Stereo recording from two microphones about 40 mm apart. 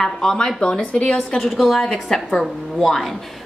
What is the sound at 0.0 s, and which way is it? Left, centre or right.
Speech, centre.